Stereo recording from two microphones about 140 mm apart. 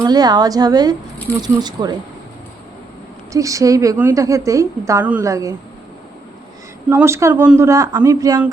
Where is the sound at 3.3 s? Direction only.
25° right (ahead or behind).